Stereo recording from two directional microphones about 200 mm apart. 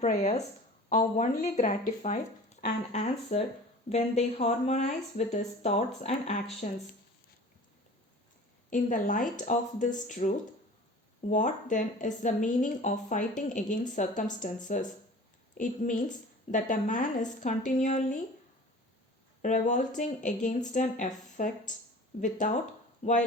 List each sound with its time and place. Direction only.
0.0 s a woman's voice: 35° left (ahead or behind)
8.7 s a woman's voice: 40° left (ahead or behind)
19.4 s a woman's voice: 40° left (ahead or behind)